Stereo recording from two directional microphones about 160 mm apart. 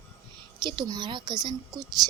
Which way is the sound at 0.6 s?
25° right (ahead or behind).